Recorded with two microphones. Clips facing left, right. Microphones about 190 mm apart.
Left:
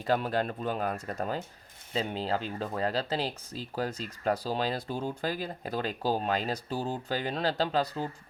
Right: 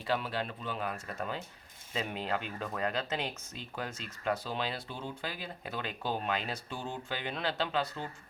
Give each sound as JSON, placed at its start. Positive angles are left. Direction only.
{"t": 0.0, "sound": "speech", "side_deg": 45}